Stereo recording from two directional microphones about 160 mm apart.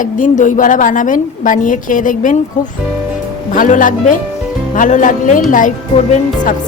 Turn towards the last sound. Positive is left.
turn(degrees=55)  # may be behind; listen again after turning